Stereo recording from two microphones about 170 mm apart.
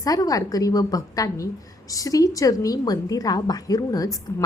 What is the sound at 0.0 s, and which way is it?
A woman's voice, 20° left (ahead or behind).